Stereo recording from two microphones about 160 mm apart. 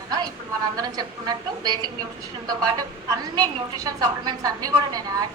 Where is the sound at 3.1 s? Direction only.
25° right (ahead or behind).